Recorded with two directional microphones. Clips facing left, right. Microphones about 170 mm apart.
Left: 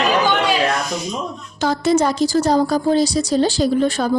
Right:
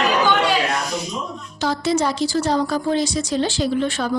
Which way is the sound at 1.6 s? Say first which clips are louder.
Left 4 dB; 50° left (ahead or behind).